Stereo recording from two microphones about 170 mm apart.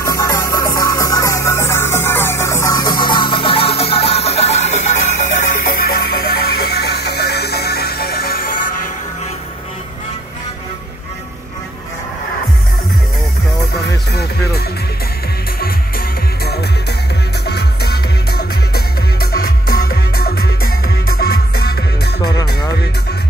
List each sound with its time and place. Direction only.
0.0 s music: 20° left (ahead or behind); by 4.9 s 40° left (ahead or behind)
5.7 s music: 65° left (ahead or behind)
17.5 s music: 70° left (ahead or behind)